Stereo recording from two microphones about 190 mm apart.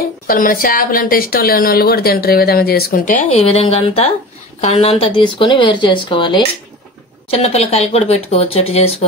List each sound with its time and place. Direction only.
0.3 s a woman's voice: 50° left (ahead or behind); by 8.9 s 30° left (ahead or behind)